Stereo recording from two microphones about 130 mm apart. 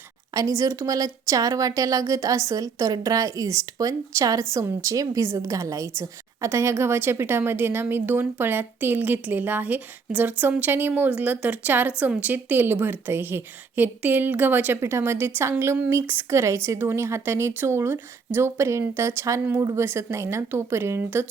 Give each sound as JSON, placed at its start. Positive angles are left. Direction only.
{"t": 0.3, "sound": "a woman's voice", "side_deg": -25}